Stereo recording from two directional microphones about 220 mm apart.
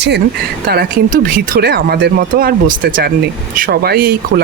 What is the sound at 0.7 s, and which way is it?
Speech, 40° right (ahead or behind).